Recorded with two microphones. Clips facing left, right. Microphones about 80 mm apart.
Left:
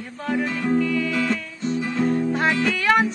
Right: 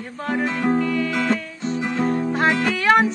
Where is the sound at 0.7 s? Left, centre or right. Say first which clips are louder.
Even; right.